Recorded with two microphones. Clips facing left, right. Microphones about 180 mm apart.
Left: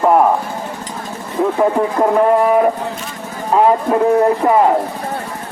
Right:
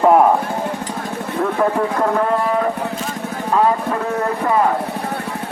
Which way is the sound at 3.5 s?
25° left (ahead or behind).